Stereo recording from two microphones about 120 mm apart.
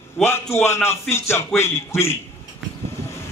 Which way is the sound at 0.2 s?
20° left (ahead or behind).